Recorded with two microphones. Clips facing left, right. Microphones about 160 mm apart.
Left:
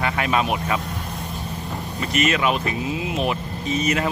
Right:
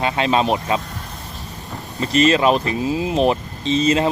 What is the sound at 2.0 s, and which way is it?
Speech, 30° right (ahead or behind).